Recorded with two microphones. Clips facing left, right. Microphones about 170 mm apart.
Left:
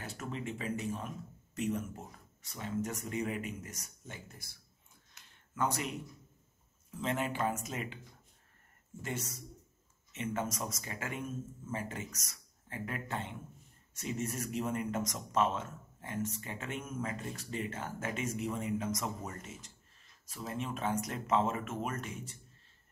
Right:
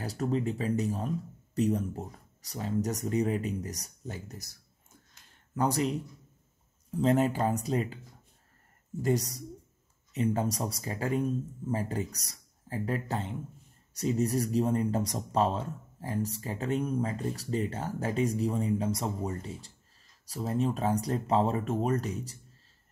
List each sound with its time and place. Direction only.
0.0 s speech: 35° right (ahead or behind)
9.0 s speech: 35° right (ahead or behind)